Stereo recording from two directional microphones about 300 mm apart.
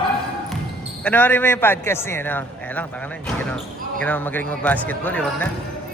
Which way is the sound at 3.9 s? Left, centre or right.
Centre.